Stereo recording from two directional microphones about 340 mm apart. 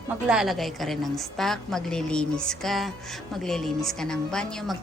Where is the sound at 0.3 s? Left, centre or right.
Centre.